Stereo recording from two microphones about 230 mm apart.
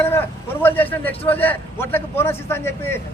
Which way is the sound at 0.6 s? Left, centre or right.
Centre.